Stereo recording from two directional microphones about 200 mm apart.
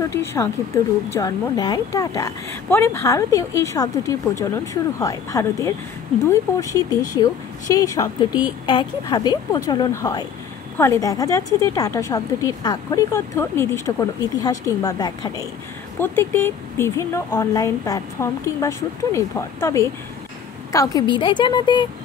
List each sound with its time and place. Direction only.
0.1 s a woman's voice: 15° left (ahead or behind)